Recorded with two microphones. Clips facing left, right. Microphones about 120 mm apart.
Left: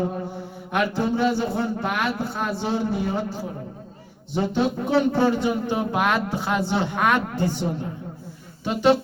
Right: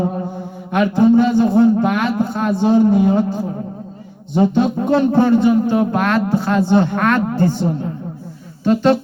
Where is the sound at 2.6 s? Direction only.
15° right (ahead or behind).